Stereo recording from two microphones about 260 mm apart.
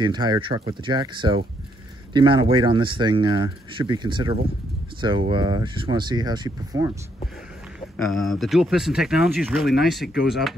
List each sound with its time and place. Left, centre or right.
0.0 s speech: centre
8.0 s speech: centre